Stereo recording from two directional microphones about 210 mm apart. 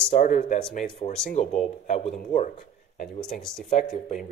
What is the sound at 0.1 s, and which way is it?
Speech, 40° left (ahead or behind).